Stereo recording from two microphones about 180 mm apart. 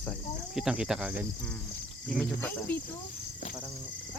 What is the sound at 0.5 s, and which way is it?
Speech, 5° right (ahead or behind).